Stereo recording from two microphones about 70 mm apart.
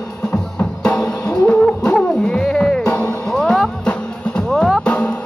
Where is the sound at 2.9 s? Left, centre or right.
Centre.